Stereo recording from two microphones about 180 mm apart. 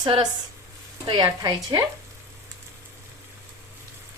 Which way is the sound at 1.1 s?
25° right (ahead or behind).